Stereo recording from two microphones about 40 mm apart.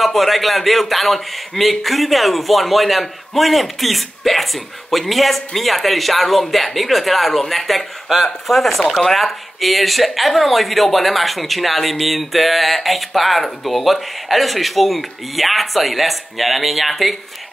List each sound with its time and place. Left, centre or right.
0.0 s speech: centre
8.8 s speech: centre
9.1 s speech: centre